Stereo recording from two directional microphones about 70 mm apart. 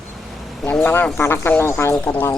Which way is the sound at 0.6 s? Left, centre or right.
Left.